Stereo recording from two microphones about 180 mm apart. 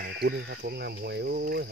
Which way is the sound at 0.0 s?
65° right (ahead or behind).